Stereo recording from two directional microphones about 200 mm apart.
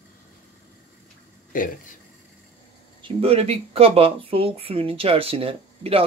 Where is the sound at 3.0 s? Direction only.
30° right (ahead or behind).